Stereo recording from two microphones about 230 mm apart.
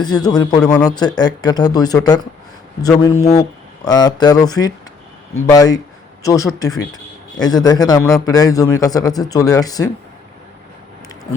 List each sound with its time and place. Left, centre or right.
0.2 s a man's voice: centre